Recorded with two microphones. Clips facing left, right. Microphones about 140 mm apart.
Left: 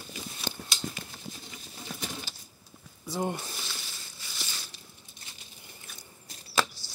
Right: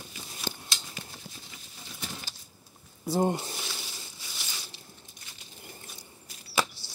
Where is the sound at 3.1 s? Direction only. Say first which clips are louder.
Right 5 dB; 35° right (ahead or behind).